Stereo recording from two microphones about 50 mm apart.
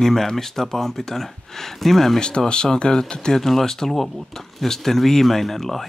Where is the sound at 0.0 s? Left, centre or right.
Centre.